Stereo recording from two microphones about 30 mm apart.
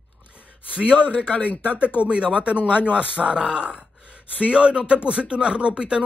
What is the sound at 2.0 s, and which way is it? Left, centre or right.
Speech, right.